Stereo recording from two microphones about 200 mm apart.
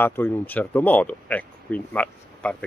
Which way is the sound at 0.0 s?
10° left (ahead or behind).